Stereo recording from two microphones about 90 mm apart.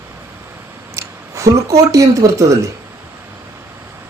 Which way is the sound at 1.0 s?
35° right (ahead or behind).